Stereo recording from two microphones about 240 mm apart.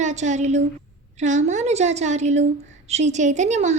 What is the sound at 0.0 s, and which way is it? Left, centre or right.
Speech, right.